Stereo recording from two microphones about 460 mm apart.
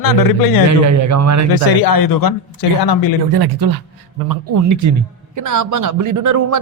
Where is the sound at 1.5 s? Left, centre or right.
Left.